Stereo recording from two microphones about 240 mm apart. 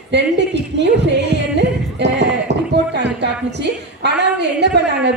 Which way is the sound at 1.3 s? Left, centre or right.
Right.